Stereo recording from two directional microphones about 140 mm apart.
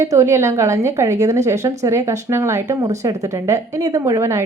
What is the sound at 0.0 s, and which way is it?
Speech, 20° right (ahead or behind).